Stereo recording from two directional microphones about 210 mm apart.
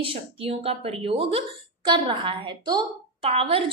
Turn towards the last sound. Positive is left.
turn(degrees=-25)  # may be behind; listen again after turning